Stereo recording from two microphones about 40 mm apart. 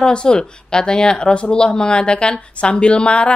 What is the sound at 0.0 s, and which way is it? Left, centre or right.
Speech, left.